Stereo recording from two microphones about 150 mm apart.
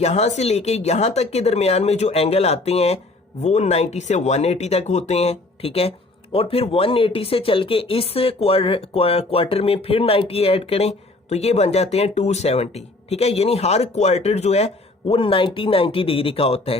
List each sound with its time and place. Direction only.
0.0 s speech: 45° left (ahead or behind)